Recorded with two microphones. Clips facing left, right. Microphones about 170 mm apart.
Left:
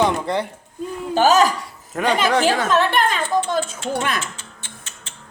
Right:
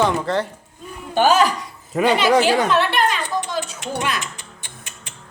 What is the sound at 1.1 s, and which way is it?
Speech, 40° left (ahead or behind).